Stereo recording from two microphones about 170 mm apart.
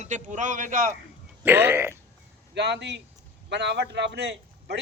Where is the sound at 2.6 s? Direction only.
90° right.